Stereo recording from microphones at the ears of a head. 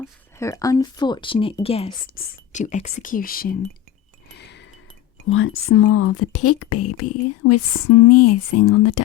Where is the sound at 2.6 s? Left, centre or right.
Left.